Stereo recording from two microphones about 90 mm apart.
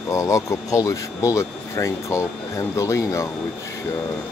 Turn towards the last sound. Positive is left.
turn(degrees=35)  # may be behind; listen again after turning